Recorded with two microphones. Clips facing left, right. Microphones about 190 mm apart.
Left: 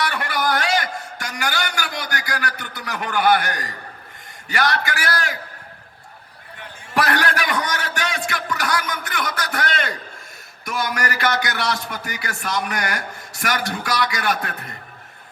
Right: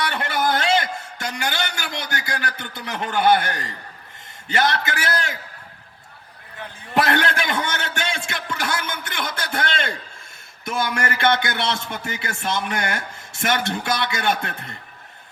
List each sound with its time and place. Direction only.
0.0 s a sound: 25° right (ahead or behind)
4.4 s speech: 25° right (ahead or behind)
6.6 s speech: 25° right (ahead or behind)